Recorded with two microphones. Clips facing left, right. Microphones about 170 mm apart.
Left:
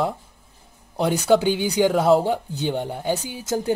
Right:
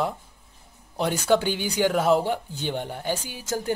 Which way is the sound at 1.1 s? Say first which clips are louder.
Left 4 dB; 15° left (ahead or behind).